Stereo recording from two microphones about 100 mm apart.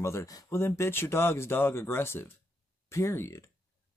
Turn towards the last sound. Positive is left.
turn(degrees=30)  # may be behind; listen again after turning